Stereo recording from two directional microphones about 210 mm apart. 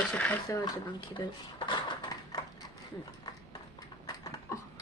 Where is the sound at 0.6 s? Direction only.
20° left (ahead or behind).